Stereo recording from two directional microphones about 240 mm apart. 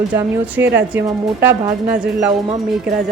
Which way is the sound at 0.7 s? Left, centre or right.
Centre.